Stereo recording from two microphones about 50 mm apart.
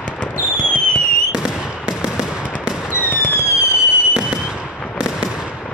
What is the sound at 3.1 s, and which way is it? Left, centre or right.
Fireworks, left.